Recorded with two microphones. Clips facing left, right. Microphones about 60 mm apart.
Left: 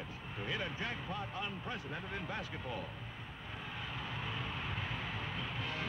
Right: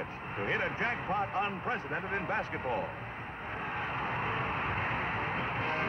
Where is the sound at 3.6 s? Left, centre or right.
Right.